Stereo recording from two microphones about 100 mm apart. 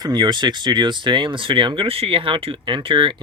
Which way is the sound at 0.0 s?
45° right (ahead or behind).